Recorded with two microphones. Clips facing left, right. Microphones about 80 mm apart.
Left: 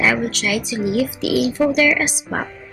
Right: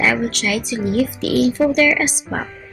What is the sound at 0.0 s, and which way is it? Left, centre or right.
A woman's voice, centre.